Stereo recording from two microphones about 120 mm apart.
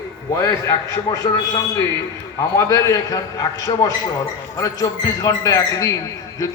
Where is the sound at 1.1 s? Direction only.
30° left (ahead or behind).